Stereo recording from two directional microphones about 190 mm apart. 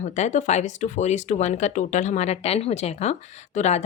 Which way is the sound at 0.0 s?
40° left (ahead or behind).